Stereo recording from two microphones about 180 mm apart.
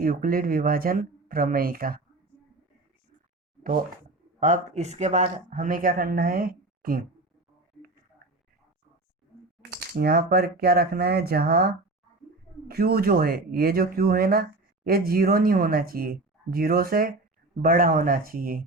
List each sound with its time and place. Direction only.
0.0 s speech: 50° right (ahead or behind)
3.6 s speech: 50° right (ahead or behind)
10.0 s speech: 60° right (ahead or behind)